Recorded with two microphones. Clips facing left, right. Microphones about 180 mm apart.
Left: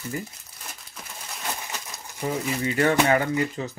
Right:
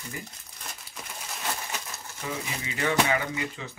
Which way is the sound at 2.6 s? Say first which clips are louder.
Left 5 dB; 50° left (ahead or behind).